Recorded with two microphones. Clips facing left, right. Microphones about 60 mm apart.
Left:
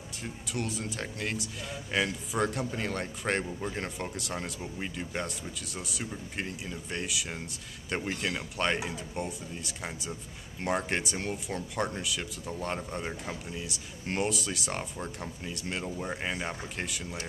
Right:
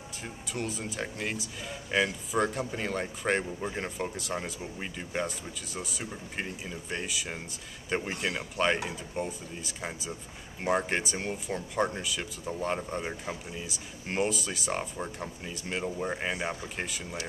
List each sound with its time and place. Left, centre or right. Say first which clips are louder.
0.2 s speech: even; centre